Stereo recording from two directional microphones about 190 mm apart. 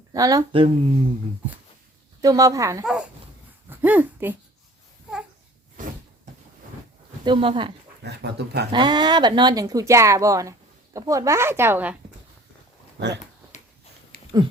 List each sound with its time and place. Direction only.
0.1 s speech: 20° right (ahead or behind)
2.2 s a woman's voice: 15° right (ahead or behind)
3.7 s a sound: 10° right (ahead or behind)
7.3 s speech: 25° right (ahead or behind)
8.0 s speech: 60° right (ahead or behind)
8.7 s a woman's voice: 25° right (ahead or behind)
13.0 s speech: 65° right (ahead or behind)